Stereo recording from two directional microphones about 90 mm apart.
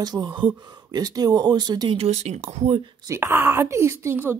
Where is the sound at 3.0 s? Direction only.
30° right (ahead or behind).